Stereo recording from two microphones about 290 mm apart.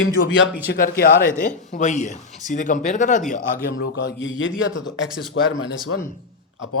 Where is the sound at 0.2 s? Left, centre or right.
Left.